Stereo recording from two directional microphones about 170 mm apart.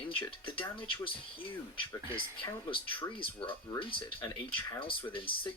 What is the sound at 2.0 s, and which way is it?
Speech, 30° left (ahead or behind).